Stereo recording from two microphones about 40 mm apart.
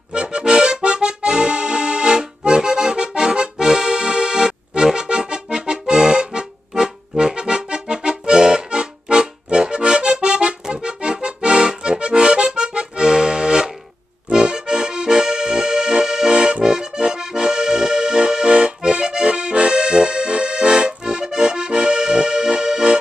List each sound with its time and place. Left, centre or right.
0.1 s accordion: right